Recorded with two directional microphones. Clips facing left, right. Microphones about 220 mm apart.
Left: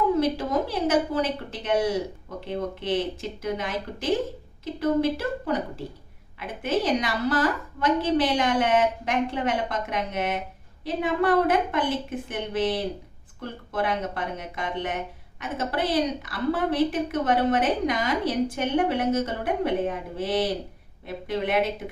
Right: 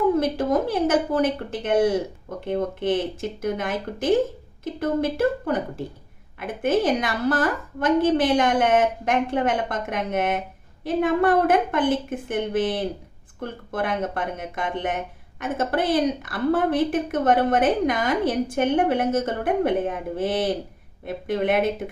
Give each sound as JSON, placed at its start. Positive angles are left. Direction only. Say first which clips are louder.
{"t": 0.2, "sound": "a woman's voice", "louder": "right 2 dB", "side_deg": -50}
{"t": 6.6, "sound": "a woman's voice", "louder": "right 3 dB", "side_deg": -50}